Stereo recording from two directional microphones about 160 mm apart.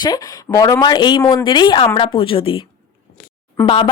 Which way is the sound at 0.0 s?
25° left (ahead or behind).